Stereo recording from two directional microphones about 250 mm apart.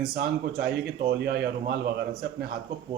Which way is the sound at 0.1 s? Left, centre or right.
Right.